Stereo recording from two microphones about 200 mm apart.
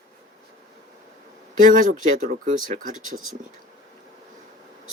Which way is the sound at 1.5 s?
40° right (ahead or behind).